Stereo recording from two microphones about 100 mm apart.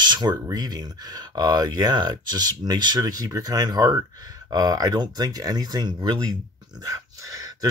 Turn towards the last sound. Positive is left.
turn(degrees=-35)  # may be behind; listen again after turning